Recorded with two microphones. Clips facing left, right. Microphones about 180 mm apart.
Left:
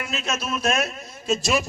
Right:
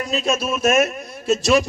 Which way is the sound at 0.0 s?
40° right (ahead or behind).